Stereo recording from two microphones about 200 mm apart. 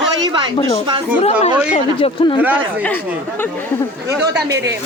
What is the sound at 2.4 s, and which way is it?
Speech, 10° right (ahead or behind).